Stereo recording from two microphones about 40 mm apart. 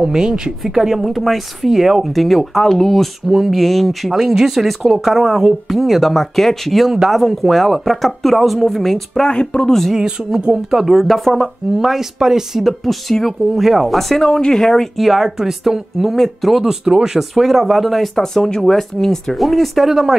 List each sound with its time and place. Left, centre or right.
0.0 s speech: centre
2.1 s speech: centre
4.1 s speech: centre
9.3 s speech: left
9.9 s speech: centre
10.7 s speech: centre
11.8 s speech: centre
13.9 s speech: centre
15.0 s speech: centre
16.6 s speech: centre
19.8 s speech: centre